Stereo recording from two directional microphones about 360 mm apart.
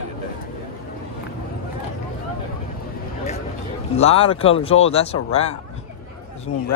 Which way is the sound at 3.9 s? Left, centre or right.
Centre.